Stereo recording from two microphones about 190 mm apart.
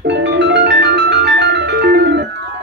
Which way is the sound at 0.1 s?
65° right (ahead or behind).